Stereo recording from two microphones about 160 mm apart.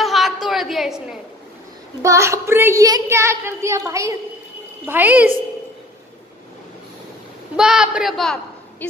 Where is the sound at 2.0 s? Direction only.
20° right (ahead or behind).